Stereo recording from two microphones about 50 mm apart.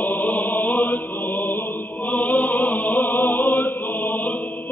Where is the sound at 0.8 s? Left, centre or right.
Left.